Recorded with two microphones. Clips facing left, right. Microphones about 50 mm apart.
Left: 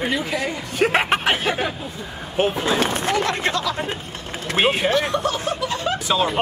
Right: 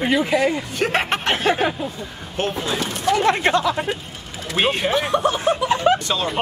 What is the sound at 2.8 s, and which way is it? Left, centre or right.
Speech, left.